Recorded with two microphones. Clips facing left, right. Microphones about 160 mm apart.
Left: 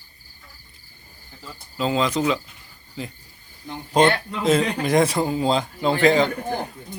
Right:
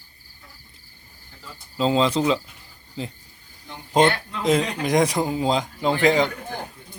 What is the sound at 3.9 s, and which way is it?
Speech, 20° right (ahead or behind).